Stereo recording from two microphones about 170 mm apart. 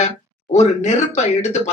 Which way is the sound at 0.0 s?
40° left (ahead or behind).